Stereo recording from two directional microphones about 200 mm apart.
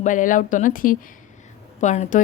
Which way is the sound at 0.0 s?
40° left (ahead or behind).